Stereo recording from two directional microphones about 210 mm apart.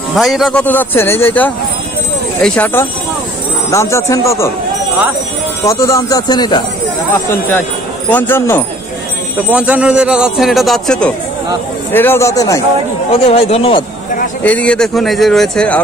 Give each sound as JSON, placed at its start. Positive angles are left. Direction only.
{"t": 0.1, "sound": "speech", "side_deg": 0}
{"t": 5.7, "sound": "speech", "side_deg": 15}
{"t": 8.1, "sound": "speech", "side_deg": 10}
{"t": 9.5, "sound": "a man's voice", "side_deg": -5}
{"t": 13.1, "sound": "speech", "side_deg": 30}
{"t": 14.4, "sound": "a man's voice", "side_deg": 5}